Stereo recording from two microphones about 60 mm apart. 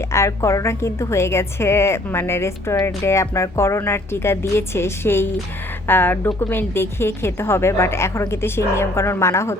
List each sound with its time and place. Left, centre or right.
0.1 s a woman's voice: left